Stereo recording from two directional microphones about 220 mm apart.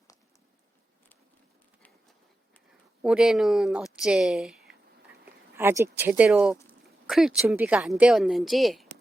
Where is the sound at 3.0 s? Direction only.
5° right (ahead or behind).